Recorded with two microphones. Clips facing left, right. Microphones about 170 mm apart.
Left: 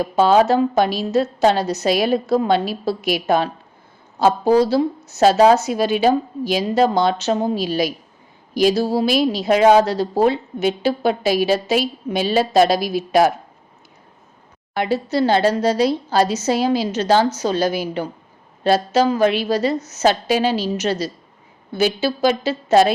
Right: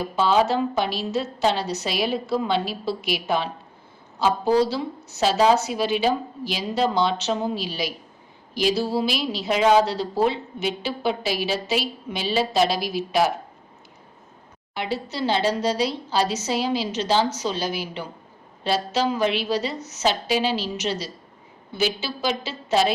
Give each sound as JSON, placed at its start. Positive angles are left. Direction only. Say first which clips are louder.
{"t": 0.2, "sound": "speech", "louder": "left 6 dB", "side_deg": 45}
{"t": 14.7, "sound": "speech", "louder": "left 8 dB", "side_deg": 45}